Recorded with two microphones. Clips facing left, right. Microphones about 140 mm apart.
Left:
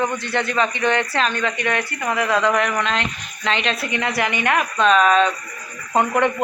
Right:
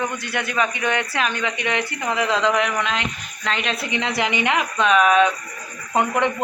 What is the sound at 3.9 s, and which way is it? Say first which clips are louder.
A man's voice: right 1 dB; 15° right (ahead or behind).